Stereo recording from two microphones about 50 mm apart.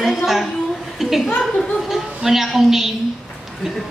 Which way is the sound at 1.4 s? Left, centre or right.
Centre.